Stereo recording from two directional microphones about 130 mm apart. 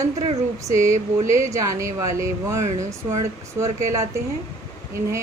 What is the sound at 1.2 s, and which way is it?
Speech, 25° right (ahead or behind).